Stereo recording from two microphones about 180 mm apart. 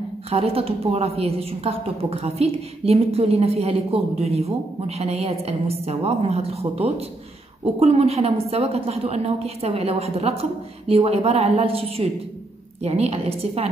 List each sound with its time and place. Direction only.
0.3 s a woman's voice: 30° right (ahead or behind)